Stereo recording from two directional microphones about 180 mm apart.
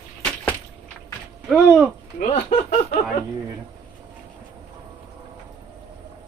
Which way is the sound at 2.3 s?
35° left (ahead or behind).